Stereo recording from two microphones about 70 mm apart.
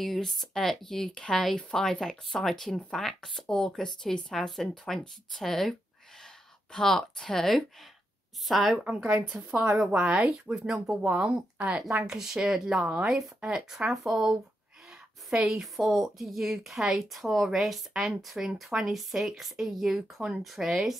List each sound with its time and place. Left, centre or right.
0.0 s a woman's voice: centre
8.7 s speech: centre
10.5 s a woman's voice: centre
11.0 s speech: centre
12.0 s a woman's voice: centre